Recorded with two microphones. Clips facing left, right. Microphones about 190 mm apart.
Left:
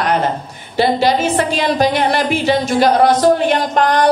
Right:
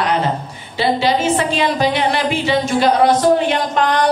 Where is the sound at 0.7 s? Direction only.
45° left (ahead or behind).